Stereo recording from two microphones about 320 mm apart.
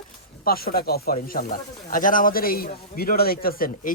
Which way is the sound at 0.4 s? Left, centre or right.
Left.